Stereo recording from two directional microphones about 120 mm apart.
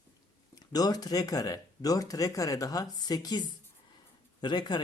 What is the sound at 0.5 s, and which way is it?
Speech, 30° left (ahead or behind).